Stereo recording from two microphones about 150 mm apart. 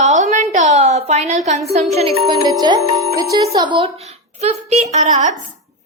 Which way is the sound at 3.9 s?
45° right (ahead or behind).